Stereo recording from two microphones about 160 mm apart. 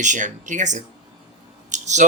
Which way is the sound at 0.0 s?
50° right (ahead or behind).